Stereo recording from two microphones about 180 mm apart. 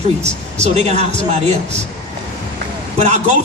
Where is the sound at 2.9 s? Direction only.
40° right (ahead or behind).